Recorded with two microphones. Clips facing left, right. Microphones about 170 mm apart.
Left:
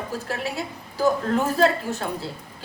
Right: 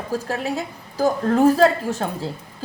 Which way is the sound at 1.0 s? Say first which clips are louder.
Right 5 dB; 35° right (ahead or behind).